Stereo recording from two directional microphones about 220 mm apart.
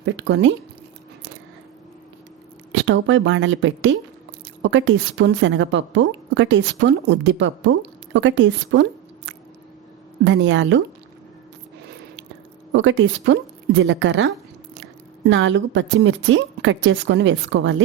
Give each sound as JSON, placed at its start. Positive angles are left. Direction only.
{"t": 0.0, "sound": "a woman's voice", "side_deg": -55}
{"t": 2.7, "sound": "a woman's voice", "side_deg": -60}
{"t": 10.2, "sound": "a woman's voice", "side_deg": -55}
{"t": 12.7, "sound": "a woman's voice", "side_deg": -55}